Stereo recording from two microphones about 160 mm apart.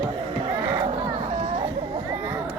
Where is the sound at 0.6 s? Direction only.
15° right (ahead or behind).